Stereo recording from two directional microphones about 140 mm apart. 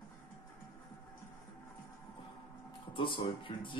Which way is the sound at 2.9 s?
35° left (ahead or behind).